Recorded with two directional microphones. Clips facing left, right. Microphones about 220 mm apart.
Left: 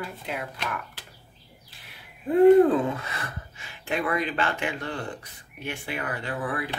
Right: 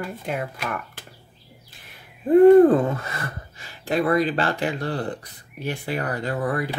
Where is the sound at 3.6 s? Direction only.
35° right (ahead or behind).